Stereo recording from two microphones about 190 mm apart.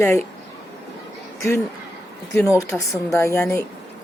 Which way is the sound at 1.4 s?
15° left (ahead or behind).